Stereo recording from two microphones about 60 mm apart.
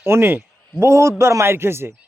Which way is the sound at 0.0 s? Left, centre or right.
Right.